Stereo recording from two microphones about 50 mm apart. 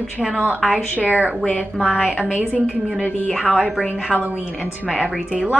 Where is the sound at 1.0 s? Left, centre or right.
Right.